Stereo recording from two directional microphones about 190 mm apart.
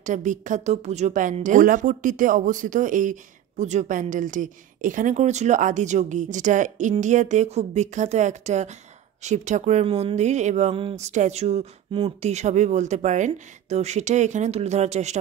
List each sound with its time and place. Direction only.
0.0 s a woman's voice: 40° right (ahead or behind)